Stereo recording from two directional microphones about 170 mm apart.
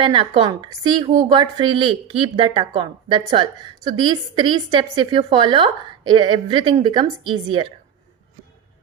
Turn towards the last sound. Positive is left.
turn(degrees=-30)  # may be behind; listen again after turning